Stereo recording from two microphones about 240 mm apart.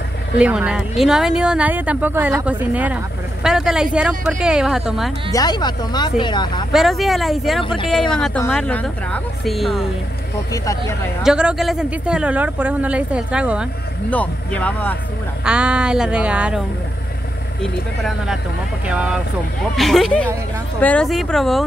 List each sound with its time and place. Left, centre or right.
0.4 s speech: centre
5.3 s speech: centre
6.7 s speech: centre
10.5 s speech: centre
11.2 s speech: centre
14.1 s speech: centre
15.4 s speech: centre